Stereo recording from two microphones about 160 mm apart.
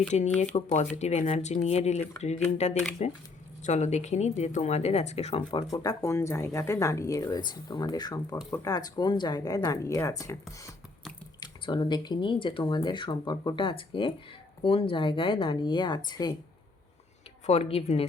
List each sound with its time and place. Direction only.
0.1 s speech: 40° left (ahead or behind)
5.7 s speech: 20° left (ahead or behind)
11.3 s speech: 25° left (ahead or behind)
17.4 s speech: 40° left (ahead or behind)